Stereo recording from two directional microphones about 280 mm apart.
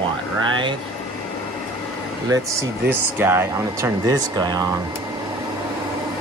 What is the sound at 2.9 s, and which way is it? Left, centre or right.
Speech, centre.